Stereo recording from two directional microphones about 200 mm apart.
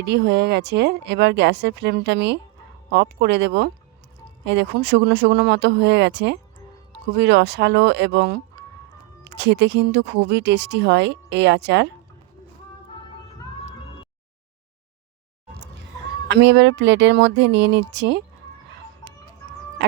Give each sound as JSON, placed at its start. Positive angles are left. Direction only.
{"t": 0.0, "sound": "speech", "side_deg": -60}
{"t": 16.3, "sound": "speech", "side_deg": -60}